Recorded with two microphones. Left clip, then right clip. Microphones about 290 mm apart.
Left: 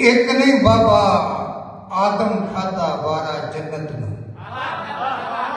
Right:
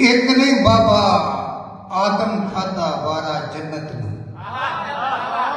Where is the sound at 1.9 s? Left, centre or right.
Left.